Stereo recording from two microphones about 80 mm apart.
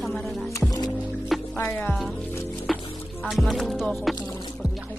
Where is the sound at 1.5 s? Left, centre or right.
Left.